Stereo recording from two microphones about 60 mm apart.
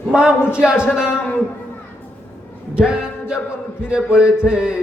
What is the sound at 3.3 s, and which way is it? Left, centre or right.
Speech, centre.